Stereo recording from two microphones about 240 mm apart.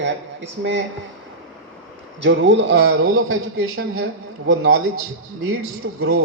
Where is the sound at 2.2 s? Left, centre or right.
Right.